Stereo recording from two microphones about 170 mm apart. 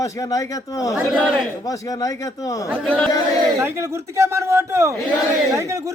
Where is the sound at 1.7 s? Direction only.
20° left (ahead or behind).